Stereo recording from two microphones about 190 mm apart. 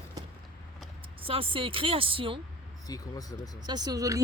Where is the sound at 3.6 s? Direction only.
20° right (ahead or behind).